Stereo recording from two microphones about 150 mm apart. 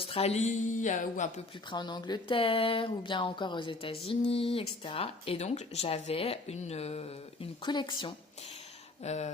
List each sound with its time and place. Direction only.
0.0 s speech: 40° left (ahead or behind); by 1.3 s 55° left (ahead or behind)
1.7 s speech: 30° left (ahead or behind)
7.6 s speech: 30° left (ahead or behind)
9.0 s speech: 50° left (ahead or behind)